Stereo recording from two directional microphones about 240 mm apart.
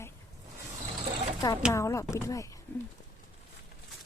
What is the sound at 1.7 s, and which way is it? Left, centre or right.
Speech, centre.